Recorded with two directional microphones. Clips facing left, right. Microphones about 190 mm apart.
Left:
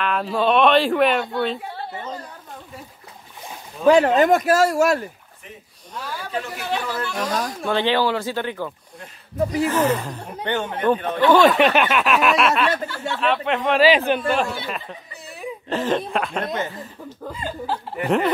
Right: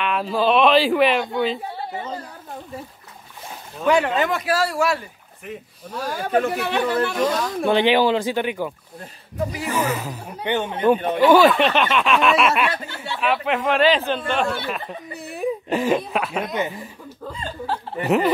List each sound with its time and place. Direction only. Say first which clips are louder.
0.0 s speech: even; centre (ahead or behind)
1.2 s speech: right 1 dB; 15° right (ahead or behind)
3.8 s speech: left 4 dB; 40° left (ahead or behind)
5.9 s speech: right 7 dB; 45° right (ahead or behind)
7.2 s speech: right 4 dB; 15° right (ahead or behind); by 14.6 s 5° left (ahead or behind)
15.7 s speech: even; 10° right (ahead or behind)
16.5 s speech: right 2 dB; 15° right (ahead or behind)
17.4 s speech: left 1 dB; 10° left (ahead or behind)
18.0 s speech: right 1 dB; 5° right (ahead or behind)